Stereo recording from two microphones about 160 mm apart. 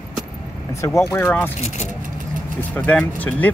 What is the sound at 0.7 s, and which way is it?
Speech, 15° left (ahead or behind).